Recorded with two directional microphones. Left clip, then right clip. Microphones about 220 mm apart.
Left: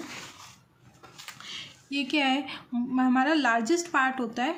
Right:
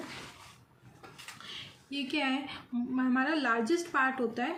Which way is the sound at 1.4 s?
55° left (ahead or behind).